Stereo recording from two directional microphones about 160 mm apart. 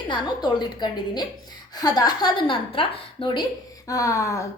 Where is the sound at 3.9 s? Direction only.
20° left (ahead or behind).